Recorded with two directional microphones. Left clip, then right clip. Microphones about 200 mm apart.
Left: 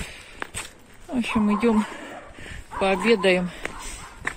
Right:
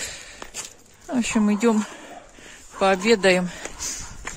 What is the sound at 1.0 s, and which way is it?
Speech, 45° right (ahead or behind).